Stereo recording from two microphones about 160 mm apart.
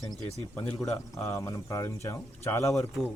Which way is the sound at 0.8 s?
20° left (ahead or behind).